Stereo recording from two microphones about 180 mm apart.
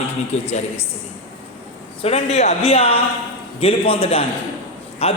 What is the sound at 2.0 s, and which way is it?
A man's voice, 35° left (ahead or behind).